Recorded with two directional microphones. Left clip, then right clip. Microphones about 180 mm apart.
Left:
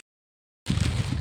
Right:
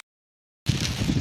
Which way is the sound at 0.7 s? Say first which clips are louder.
Right 3 dB; 10° left (ahead or behind).